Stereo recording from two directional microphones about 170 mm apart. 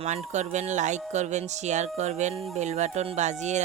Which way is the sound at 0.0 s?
40° right (ahead or behind).